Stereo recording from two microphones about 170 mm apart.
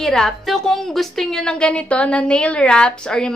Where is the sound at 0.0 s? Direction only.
Centre (ahead or behind).